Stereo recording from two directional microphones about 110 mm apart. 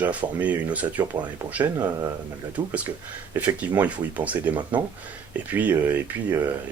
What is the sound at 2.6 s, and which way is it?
Speech, 40° right (ahead or behind).